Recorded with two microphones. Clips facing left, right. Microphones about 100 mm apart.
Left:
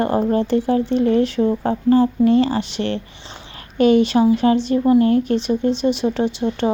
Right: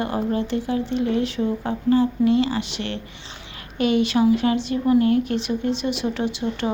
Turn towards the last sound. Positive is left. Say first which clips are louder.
# left 5 dB
turn(degrees=30)  # may be behind; listen again after turning